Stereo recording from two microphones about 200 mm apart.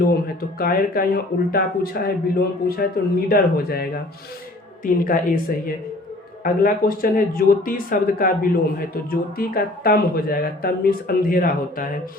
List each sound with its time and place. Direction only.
0.6 s speech: 45° left (ahead or behind)
4.9 s speech: 45° left (ahead or behind)